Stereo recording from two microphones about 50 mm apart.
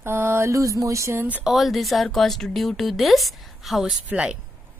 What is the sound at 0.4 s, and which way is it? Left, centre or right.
Music, right.